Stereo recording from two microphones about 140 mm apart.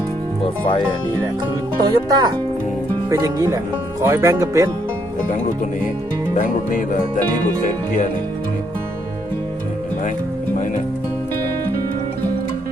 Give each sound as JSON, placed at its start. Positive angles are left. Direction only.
{"t": 1.8, "sound": "speech", "side_deg": -30}
{"t": 6.3, "sound": "music", "side_deg": 65}